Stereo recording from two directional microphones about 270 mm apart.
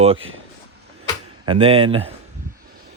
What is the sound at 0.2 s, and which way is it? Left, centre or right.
Speech, right.